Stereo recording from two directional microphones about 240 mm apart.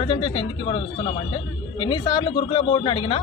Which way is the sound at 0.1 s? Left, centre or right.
Left.